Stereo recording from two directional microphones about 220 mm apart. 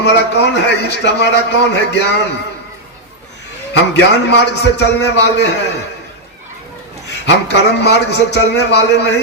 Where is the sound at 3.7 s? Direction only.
50° left (ahead or behind).